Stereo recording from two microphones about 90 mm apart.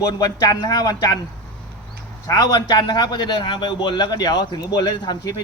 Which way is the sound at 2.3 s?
45° left (ahead or behind).